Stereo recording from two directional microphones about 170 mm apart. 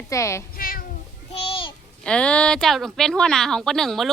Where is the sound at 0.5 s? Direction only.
60° left (ahead or behind).